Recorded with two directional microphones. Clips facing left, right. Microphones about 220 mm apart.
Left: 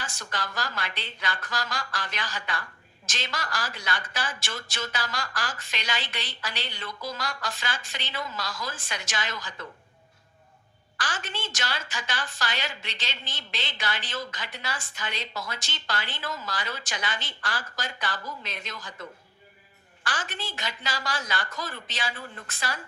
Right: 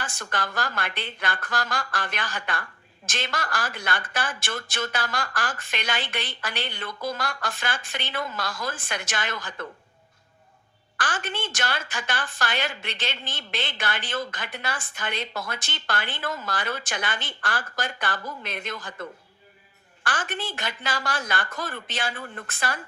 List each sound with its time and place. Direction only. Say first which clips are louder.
0.0 s a woman's voice: right 4 dB; 55° right (ahead or behind)
10.9 s a woman's voice: right 4 dB; 50° right (ahead or behind)
20.1 s a woman's voice: right 4 dB; 50° right (ahead or behind)